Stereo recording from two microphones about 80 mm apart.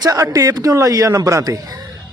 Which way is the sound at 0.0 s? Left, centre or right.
Right.